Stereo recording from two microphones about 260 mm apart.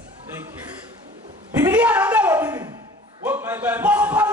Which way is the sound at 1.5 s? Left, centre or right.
Centre.